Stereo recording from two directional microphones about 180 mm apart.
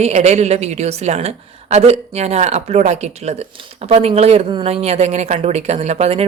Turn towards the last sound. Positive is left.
turn(degrees=-35)  # may be behind; listen again after turning